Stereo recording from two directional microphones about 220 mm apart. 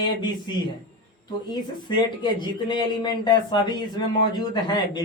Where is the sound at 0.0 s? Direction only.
20° left (ahead or behind).